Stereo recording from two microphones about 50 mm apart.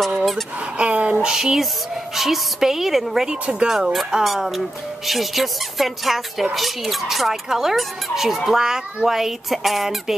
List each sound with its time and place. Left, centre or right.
0.0 s a sound: centre
0.7 s a sound: right
1.2 s fowl: centre
2.1 s speech: centre
3.3 s speech: right
3.6 s fowl: centre
4.2 s speech: centre
8.5 s fowl: centre